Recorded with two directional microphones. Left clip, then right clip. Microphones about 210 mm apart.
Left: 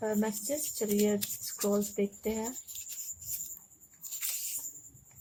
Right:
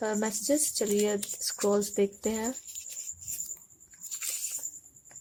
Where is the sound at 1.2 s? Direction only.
Centre (ahead or behind).